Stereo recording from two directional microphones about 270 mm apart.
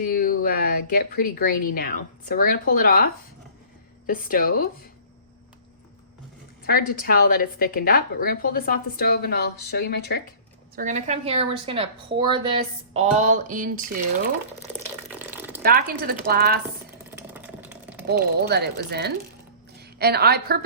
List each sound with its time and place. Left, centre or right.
0.0 s a woman's voice: left
6.7 s a woman's voice: left
10.8 s a woman's voice: right
15.1 s water: centre
15.6 s speech: right
17.1 s a sound: centre
18.1 s a woman's voice: right